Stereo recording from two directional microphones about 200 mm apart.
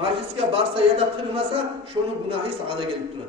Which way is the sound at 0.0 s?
30° right (ahead or behind).